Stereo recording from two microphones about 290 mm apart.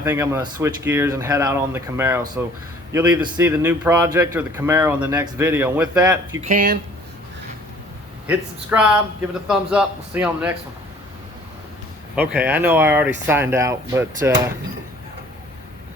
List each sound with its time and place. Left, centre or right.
0.0 s a man's voice: centre
6.4 s speech: right
8.3 s a man's voice: centre
12.1 s speech: centre